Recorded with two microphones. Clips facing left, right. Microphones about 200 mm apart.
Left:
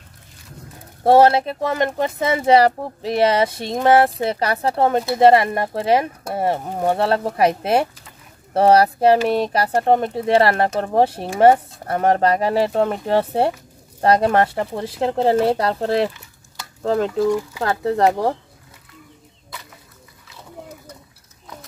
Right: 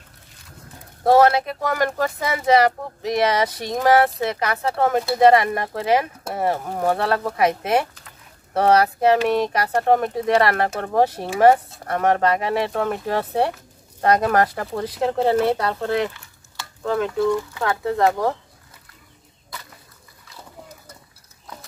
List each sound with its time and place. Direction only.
1.0 s speech: 30° left (ahead or behind)